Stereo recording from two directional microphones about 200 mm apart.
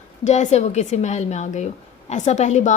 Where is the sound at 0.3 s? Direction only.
35° left (ahead or behind).